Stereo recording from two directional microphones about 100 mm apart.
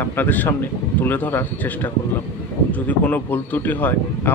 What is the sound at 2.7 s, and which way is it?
Speech, 15° left (ahead or behind).